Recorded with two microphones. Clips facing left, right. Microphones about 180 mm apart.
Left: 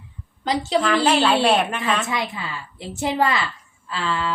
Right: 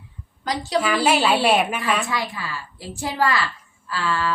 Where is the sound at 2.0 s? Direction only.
20° left (ahead or behind).